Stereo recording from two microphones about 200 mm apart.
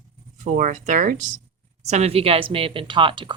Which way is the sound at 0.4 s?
40° right (ahead or behind).